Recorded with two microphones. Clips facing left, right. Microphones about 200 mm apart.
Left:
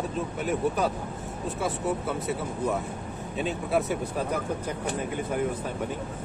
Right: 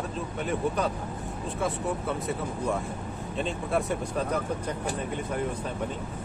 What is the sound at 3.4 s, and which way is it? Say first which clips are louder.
Speech: left 2 dB; 5° left (ahead or behind).